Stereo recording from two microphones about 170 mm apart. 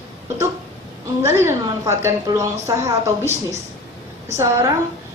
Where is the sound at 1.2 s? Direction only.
15° right (ahead or behind).